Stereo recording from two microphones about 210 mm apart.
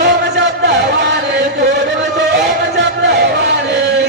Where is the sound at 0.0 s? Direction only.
55° right (ahead or behind).